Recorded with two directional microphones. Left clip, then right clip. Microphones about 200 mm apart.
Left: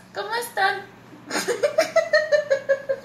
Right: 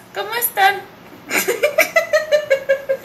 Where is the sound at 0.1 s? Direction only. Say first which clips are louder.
Right 4 dB; 35° right (ahead or behind).